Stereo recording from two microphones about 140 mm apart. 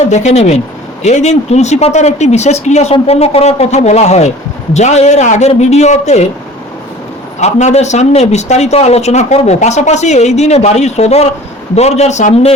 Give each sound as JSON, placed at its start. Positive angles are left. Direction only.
{"t": 0.1, "sound": "a man's voice", "side_deg": 55}
{"t": 7.3, "sound": "a man's voice", "side_deg": 55}